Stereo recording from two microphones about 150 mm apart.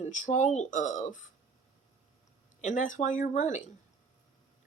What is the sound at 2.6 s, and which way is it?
Speech, 55° left (ahead or behind).